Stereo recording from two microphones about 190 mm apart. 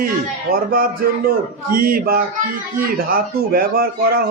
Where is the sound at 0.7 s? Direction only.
50° right (ahead or behind).